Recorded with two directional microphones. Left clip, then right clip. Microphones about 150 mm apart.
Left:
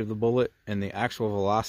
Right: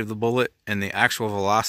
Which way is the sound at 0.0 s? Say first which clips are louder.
Right 2 dB; 5° right (ahead or behind).